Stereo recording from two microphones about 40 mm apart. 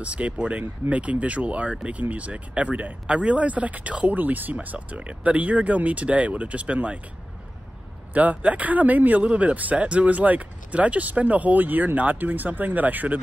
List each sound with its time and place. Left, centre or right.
0.0 s speech: right
4.6 s speech: right
8.1 s speech: right